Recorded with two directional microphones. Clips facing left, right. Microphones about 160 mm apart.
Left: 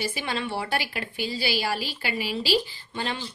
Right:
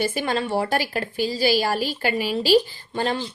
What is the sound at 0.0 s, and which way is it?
A woman's voice, 45° right (ahead or behind).